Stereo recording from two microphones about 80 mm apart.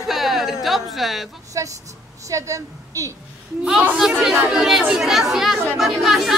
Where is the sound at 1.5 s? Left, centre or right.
Right.